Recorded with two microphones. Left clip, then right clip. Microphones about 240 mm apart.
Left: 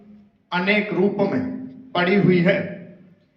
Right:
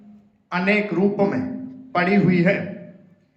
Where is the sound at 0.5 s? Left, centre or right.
Centre.